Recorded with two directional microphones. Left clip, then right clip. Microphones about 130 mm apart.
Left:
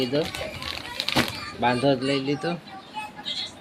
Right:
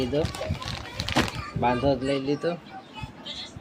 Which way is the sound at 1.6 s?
10° left (ahead or behind).